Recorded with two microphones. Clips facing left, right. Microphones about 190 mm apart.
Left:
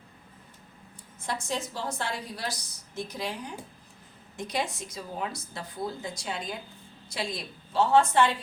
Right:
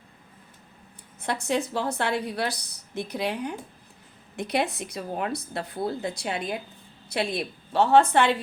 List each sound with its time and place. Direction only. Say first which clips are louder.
1.2 s a woman's voice: right 6 dB; 65° right (ahead or behind)